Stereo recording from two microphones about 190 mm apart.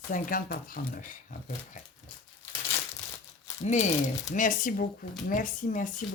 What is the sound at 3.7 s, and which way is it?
Speech, 35° left (ahead or behind).